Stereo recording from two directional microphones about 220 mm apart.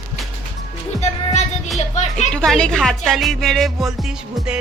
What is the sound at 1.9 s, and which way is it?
Speech, 30° left (ahead or behind).